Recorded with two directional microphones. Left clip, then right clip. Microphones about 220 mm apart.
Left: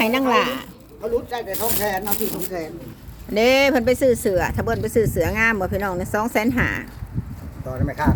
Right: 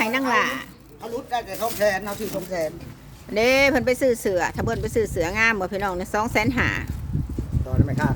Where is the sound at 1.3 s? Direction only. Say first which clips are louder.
Even; 55° right (ahead or behind).